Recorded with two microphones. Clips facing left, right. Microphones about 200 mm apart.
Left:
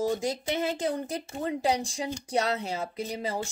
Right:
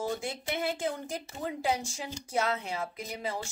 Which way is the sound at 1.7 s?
60° left (ahead or behind).